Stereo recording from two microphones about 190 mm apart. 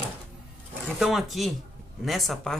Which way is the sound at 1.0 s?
Centre (ahead or behind).